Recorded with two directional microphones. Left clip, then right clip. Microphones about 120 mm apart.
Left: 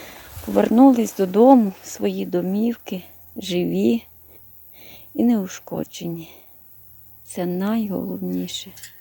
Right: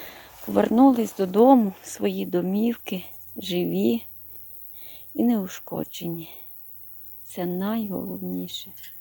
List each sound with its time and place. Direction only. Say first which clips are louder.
0.0 s speech: left 3 dB; 10° left (ahead or behind)
3.3 s a woman's voice: left 3 dB; 20° left (ahead or behind)